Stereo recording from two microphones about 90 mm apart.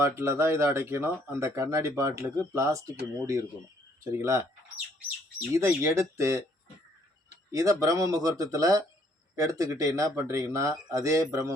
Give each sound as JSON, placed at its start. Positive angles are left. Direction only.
{"t": 0.0, "sound": "speech", "side_deg": -30}
{"t": 5.5, "sound": "speech", "side_deg": -30}
{"t": 7.5, "sound": "speech", "side_deg": -40}